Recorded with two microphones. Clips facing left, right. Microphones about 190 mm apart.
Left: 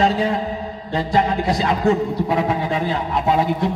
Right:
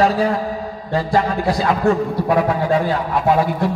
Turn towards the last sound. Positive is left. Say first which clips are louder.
# right 2 dB
turn(degrees=20)  # may be behind; listen again after turning